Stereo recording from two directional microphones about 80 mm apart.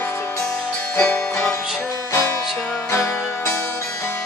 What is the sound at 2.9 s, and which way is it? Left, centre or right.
Music, left.